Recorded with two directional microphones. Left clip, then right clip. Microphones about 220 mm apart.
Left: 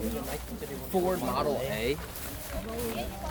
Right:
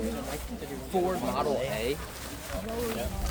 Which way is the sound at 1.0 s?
45° left (ahead or behind).